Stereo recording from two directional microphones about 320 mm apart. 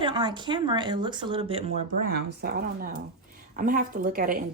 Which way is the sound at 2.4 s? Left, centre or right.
Right.